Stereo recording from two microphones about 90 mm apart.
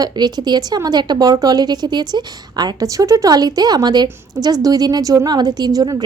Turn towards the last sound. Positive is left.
turn(degrees=-50)  # may be behind; listen again after turning